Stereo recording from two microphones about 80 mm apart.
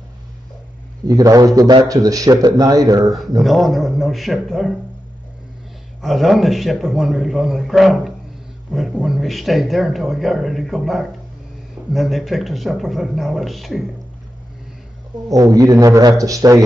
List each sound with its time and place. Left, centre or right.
1.0 s a man's voice: right
3.4 s speech: centre
6.0 s speech: centre
15.2 s a man's voice: right